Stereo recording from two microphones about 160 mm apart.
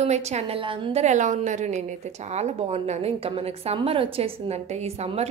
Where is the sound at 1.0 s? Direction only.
50° right (ahead or behind).